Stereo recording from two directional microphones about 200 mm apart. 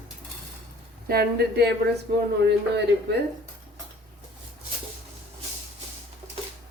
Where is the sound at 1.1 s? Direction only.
50° right (ahead or behind).